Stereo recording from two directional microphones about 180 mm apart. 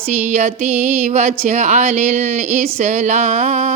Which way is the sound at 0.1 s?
40° right (ahead or behind).